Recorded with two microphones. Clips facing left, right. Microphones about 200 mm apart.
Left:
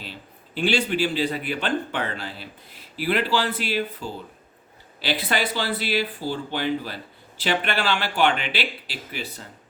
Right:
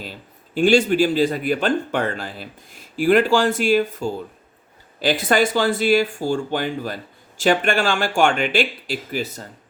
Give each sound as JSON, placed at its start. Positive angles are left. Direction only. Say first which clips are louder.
{"t": 0.0, "sound": "speech", "louder": "right 4 dB", "side_deg": -45}